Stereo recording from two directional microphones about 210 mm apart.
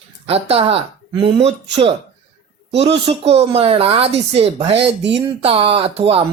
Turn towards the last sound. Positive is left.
turn(degrees=-25)  # may be behind; listen again after turning